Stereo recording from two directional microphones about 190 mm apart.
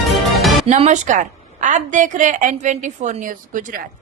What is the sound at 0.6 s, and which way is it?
A woman's voice, 35° right (ahead or behind).